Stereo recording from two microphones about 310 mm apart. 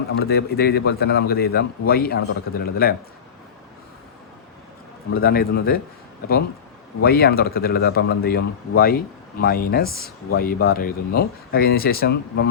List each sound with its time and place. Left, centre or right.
0.1 s a man's voice: left
5.1 s speech: left
7.0 s speech: left